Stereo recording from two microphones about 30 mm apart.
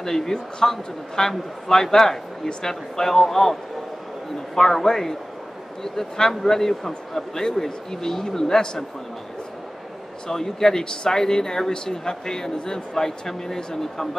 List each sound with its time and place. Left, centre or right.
0.0 s a man's voice: centre
4.6 s a man's voice: centre
10.2 s speech: centre